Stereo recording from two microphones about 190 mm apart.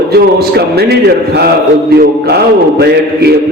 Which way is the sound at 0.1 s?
55° right (ahead or behind).